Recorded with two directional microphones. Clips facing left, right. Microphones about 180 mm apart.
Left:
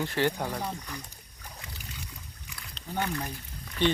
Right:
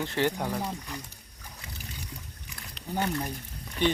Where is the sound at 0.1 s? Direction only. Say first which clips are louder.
Right 1 dB; 20° right (ahead or behind).